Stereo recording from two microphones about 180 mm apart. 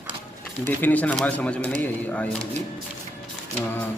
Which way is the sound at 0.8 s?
10° left (ahead or behind).